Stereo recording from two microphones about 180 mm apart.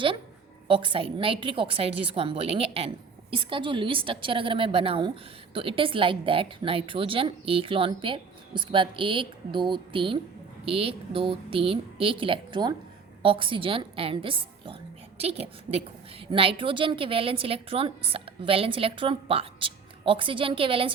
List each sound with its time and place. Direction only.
0.7 s a woman's voice: 30° right (ahead or behind)